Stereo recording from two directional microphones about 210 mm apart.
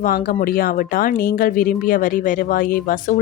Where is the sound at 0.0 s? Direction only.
40° left (ahead or behind).